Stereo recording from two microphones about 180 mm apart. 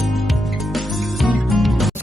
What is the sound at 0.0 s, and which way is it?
Music, centre (ahead or behind).